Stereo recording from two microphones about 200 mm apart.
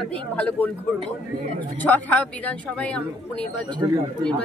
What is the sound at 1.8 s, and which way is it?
A woman's voice, 10° left (ahead or behind).